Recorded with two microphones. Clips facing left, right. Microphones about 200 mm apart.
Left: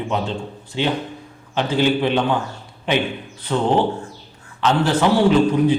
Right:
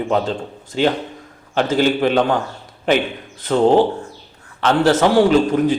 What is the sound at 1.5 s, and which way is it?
Speech, 45° right (ahead or behind).